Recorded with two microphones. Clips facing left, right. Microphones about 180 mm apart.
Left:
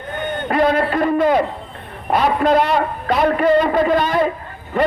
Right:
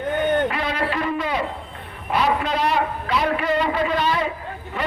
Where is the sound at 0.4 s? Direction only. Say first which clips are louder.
Left 7 dB; 50° left (ahead or behind).